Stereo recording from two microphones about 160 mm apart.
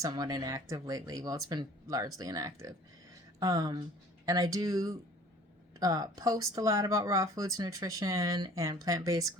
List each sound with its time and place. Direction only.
0.0 s speech: 25° right (ahead or behind)